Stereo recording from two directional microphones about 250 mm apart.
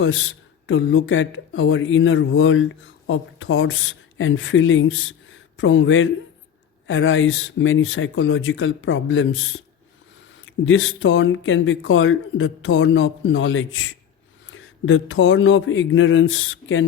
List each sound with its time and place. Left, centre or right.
0.0 s speech: left